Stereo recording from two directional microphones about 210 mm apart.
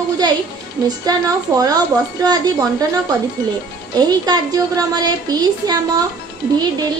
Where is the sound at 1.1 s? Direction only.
15° right (ahead or behind).